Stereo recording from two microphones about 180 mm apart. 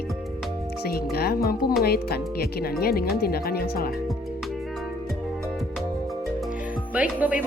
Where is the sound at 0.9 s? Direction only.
60° left (ahead or behind).